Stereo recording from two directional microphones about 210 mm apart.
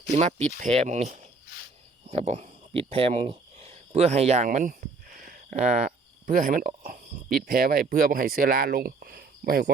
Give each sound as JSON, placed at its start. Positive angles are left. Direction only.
{"t": 0.1, "sound": "speech", "side_deg": -35}
{"t": 2.9, "sound": "a sound", "side_deg": -30}
{"t": 6.2, "sound": "speech", "side_deg": -40}